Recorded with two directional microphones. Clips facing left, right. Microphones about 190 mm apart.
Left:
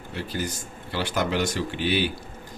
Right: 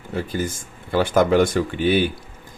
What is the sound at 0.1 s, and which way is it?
Speech, 50° right (ahead or behind).